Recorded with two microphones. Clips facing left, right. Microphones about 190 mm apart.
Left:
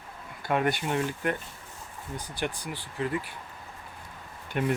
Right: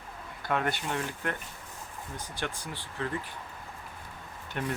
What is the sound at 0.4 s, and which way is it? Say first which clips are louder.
A man's voice: left 4 dB; 15° left (ahead or behind).